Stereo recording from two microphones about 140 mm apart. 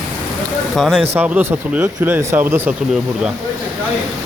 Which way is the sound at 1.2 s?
10° right (ahead or behind).